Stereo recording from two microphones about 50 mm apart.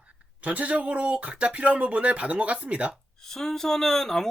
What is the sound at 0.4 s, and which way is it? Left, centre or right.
Speech, right.